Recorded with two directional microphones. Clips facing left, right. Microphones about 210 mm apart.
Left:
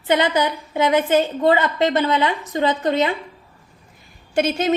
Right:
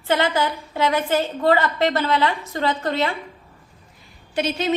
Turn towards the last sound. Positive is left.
turn(degrees=50)  # may be behind; listen again after turning